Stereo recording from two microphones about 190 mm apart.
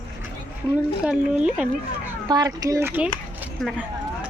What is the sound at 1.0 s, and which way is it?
Speech, 5° right (ahead or behind).